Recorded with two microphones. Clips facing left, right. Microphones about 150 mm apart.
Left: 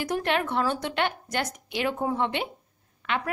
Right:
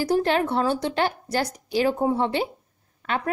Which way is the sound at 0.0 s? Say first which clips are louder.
Right 5 dB; 35° right (ahead or behind).